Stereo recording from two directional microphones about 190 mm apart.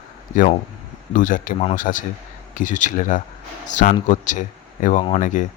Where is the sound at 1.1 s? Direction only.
45° left (ahead or behind).